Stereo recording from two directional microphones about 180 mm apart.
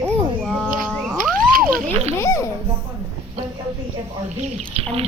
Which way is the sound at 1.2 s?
50° right (ahead or behind).